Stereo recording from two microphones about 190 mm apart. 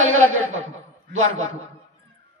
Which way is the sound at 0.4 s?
90° right.